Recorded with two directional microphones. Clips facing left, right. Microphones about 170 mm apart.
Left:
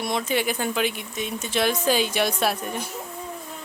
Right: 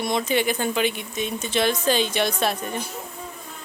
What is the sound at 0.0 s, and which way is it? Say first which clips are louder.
Speech: right 2 dB; 5° left (ahead or behind).